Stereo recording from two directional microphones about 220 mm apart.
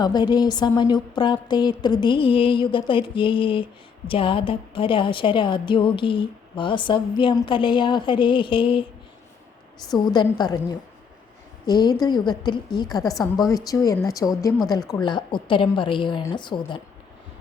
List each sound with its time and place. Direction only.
0.0 s a woman's voice: 20° left (ahead or behind)
9.9 s a woman's voice: 20° left (ahead or behind)